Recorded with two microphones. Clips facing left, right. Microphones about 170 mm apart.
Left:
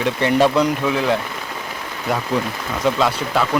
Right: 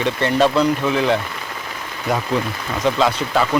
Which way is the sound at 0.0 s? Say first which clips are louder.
Left 1 dB; 10° left (ahead or behind).